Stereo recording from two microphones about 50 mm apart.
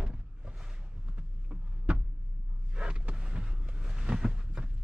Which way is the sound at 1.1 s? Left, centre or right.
Right.